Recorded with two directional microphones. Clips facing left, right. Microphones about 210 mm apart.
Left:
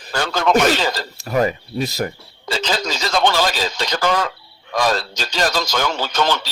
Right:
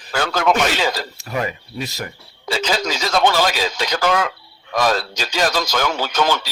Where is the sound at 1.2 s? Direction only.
35° left (ahead or behind).